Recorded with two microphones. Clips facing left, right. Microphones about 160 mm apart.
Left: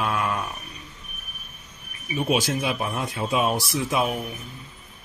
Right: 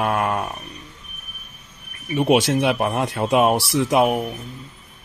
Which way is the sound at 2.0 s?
75° right (ahead or behind).